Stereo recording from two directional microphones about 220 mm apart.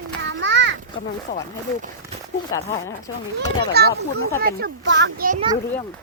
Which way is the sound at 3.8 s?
45° right (ahead or behind).